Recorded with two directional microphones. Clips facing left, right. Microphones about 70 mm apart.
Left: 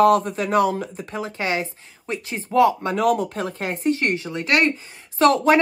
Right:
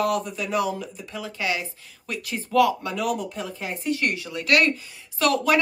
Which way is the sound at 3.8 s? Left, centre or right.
Left.